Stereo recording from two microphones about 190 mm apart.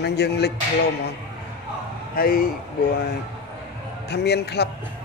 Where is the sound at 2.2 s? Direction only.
50° left (ahead or behind).